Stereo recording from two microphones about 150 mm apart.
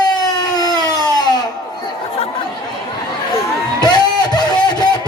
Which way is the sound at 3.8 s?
30° left (ahead or behind).